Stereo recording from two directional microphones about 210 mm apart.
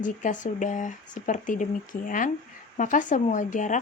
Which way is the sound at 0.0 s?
35° left (ahead or behind).